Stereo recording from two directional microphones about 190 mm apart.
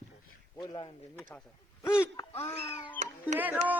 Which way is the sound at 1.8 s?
15° left (ahead or behind).